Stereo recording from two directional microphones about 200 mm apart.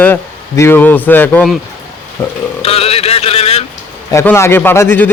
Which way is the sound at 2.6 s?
30° left (ahead or behind).